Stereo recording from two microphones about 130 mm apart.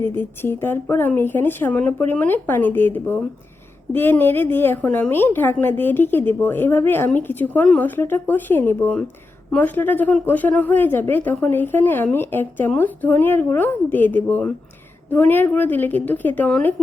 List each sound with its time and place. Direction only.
0.0 s a woman's voice: 15° left (ahead or behind)